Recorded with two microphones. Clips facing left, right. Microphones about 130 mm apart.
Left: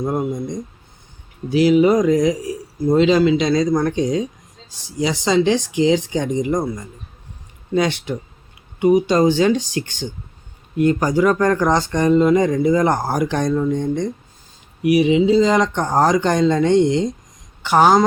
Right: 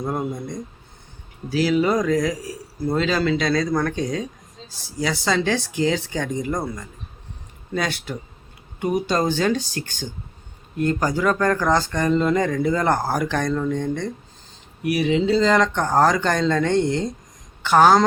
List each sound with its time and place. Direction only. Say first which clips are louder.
0.3 s speech: left 5 dB; 20° left (ahead or behind)
10.8 s speech: left 5 dB; 15° left (ahead or behind)